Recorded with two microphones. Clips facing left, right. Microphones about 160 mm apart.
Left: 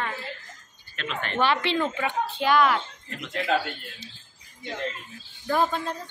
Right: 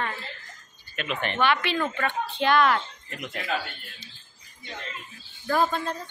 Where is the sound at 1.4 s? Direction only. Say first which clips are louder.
Left 2 dB; 30° left (ahead or behind).